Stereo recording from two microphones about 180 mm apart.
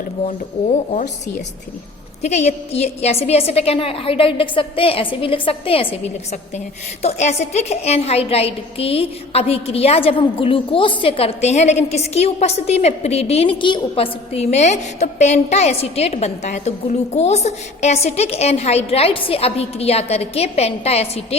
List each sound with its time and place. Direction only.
0.3 s speech: 50° left (ahead or behind)
2.2 s a woman's voice: 40° left (ahead or behind)
7.0 s a woman's voice: 35° left (ahead or behind)